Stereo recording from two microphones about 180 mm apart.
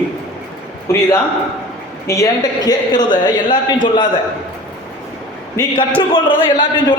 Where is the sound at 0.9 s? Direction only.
15° left (ahead or behind).